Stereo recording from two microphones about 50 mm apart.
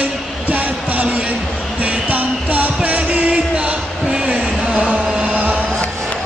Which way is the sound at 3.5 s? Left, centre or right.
Right.